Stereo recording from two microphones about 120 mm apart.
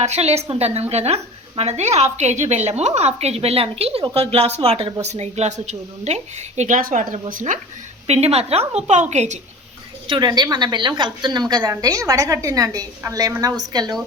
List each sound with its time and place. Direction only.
0.0 s a woman's voice: 65° right (ahead or behind)
4.9 s a woman's voice: 70° right (ahead or behind); by 7.6 s 90° right
8.0 s a woman's voice: 60° right (ahead or behind)
10.1 s a woman's voice: 35° right (ahead or behind)